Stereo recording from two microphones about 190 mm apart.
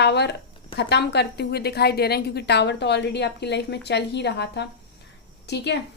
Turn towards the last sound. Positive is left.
turn(degrees=60)  # may be behind; listen again after turning